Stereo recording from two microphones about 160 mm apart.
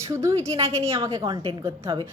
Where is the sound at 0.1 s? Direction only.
20° right (ahead or behind).